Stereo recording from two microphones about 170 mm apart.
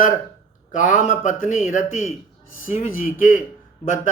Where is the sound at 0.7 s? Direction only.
50° left (ahead or behind).